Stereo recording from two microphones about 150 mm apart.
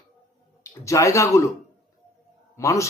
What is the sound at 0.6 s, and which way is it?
Speech, 20° left (ahead or behind).